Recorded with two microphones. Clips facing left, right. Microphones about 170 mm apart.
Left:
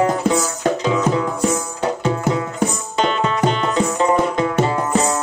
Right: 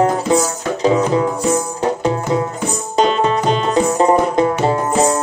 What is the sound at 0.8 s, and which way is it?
Music, 35° right (ahead or behind).